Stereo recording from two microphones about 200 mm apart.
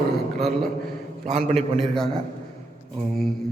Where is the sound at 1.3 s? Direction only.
35° right (ahead or behind).